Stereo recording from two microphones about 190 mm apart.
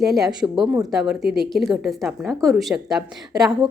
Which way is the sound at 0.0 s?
Centre (ahead or behind).